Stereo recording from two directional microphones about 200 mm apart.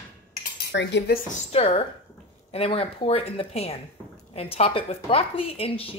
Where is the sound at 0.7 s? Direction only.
60° left (ahead or behind).